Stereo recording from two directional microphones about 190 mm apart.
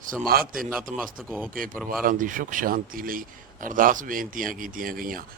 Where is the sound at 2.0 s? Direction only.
45° right (ahead or behind).